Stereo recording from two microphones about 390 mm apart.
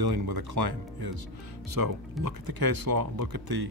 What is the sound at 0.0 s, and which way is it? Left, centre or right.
Speech, right.